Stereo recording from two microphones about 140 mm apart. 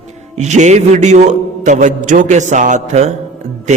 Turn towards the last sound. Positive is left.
turn(degrees=-55)  # may be behind; listen again after turning